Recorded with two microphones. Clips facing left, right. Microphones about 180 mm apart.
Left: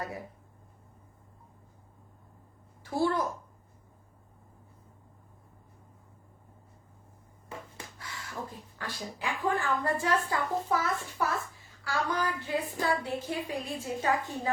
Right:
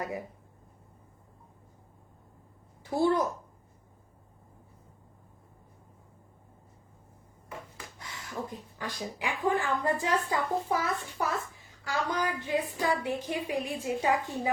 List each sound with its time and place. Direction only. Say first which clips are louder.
0.0 s a child's voice: right 3 dB; 20° right (ahead or behind)
2.9 s a child's voice: right 3 dB; 20° right (ahead or behind)
7.9 s a sound: right 1 dB; 20° right (ahead or behind)
8.8 s a woman's voice: right 1 dB; 15° right (ahead or behind)